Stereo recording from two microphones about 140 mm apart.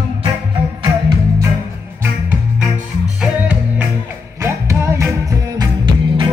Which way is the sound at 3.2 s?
10° right (ahead or behind).